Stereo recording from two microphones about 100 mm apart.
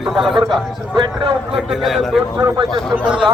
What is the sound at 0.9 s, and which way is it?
Speech, 50° right (ahead or behind).